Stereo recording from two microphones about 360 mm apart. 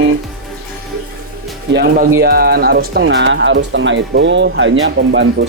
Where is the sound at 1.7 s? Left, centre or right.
Right.